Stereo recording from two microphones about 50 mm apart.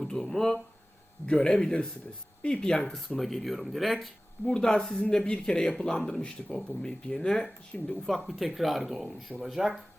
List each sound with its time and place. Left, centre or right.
0.0 s speech: centre
4.4 s speech: centre